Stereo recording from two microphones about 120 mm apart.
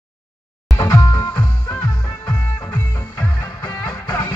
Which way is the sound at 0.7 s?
30° left (ahead or behind).